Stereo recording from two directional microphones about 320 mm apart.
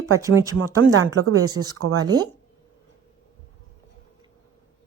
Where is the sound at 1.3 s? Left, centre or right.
Right.